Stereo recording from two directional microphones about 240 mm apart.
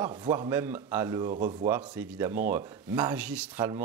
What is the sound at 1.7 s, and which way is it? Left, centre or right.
Speech, centre.